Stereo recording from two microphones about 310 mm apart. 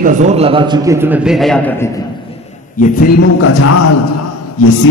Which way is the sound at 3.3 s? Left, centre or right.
Left.